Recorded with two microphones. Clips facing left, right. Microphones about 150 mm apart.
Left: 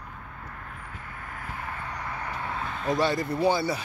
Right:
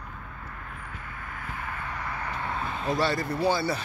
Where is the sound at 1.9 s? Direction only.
15° left (ahead or behind).